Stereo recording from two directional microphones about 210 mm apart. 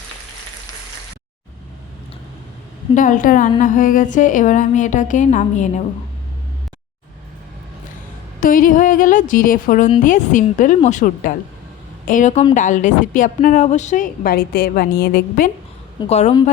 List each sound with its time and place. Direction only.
2.9 s a woman's voice: 40° left (ahead or behind)
8.4 s a woman's voice: 40° left (ahead or behind)
16.0 s a woman's voice: 30° left (ahead or behind)